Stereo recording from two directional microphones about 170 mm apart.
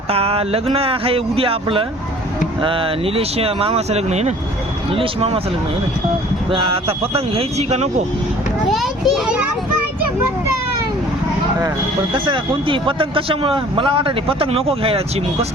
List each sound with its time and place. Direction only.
0.1 s speech: 35° right (ahead or behind)
6.5 s speech: 30° right (ahead or behind)
8.7 s a child's voice: centre (ahead or behind)
12.1 s speech: 30° right (ahead or behind)